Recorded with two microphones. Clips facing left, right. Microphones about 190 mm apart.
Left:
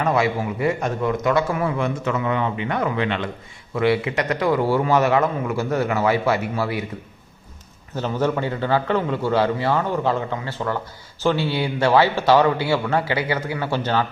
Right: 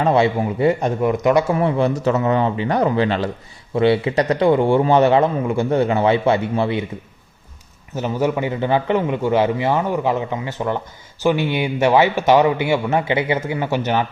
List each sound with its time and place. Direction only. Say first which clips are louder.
0.0 s a man's voice: right 4 dB; 30° right (ahead or behind)
7.9 s a man's voice: right 2 dB; 15° right (ahead or behind)